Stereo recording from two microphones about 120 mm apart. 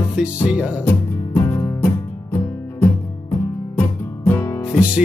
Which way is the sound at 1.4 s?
20° left (ahead or behind).